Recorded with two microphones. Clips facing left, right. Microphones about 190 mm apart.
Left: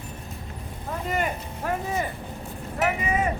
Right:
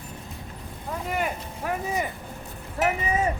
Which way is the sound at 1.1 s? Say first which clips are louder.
Left 1 dB; 5° right (ahead or behind).